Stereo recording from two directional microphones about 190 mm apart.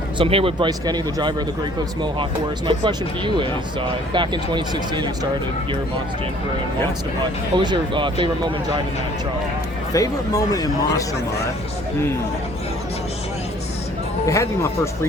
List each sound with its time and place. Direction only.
0.2 s speech: 30° right (ahead or behind)
2.6 s speech: 25° right (ahead or behind)
7.5 s speech: 25° right (ahead or behind)
9.9 s speech: 20° left (ahead or behind)
14.3 s speech: 15° left (ahead or behind)